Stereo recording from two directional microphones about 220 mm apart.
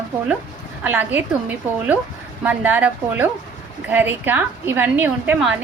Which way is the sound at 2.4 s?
5° right (ahead or behind).